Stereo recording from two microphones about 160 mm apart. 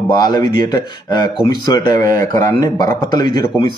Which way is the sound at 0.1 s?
25° left (ahead or behind).